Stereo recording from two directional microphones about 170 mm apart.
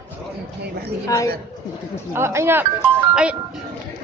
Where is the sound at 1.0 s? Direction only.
20° left (ahead or behind).